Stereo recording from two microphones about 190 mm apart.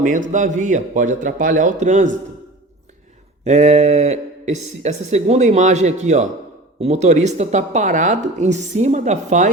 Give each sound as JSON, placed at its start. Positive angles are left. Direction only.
{"t": 0.0, "sound": "speech", "side_deg": -45}
{"t": 3.4, "sound": "speech", "side_deg": -35}